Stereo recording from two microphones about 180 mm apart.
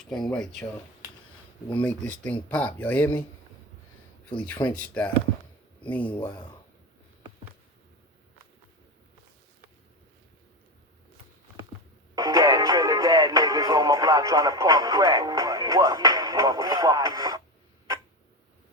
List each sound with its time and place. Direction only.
0.0 s speech: 5° left (ahead or behind)
1.8 s speech: 10° left (ahead or behind)
4.6 s speech: 10° left (ahead or behind)
6.1 s speech: 20° left (ahead or behind)
12.1 s music: 20° right (ahead or behind)